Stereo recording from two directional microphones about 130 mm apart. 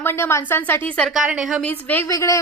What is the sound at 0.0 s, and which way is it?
A woman's voice, 20° left (ahead or behind).